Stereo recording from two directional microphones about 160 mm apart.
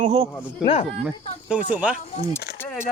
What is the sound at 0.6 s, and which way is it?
Speech, 35° left (ahead or behind).